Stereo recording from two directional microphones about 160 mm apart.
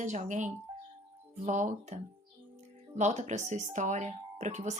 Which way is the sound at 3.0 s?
45° right (ahead or behind).